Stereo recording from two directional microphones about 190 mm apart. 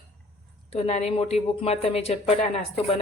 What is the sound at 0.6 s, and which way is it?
A woman's voice, 35° left (ahead or behind).